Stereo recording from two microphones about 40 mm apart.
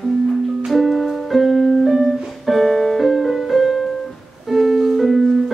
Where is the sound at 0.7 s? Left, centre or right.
Centre.